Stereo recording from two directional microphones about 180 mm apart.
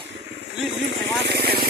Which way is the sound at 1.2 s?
65° right (ahead or behind).